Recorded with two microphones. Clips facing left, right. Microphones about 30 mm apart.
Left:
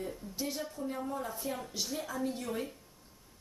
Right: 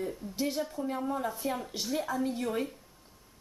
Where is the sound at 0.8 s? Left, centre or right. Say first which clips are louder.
Right 1 dB; right.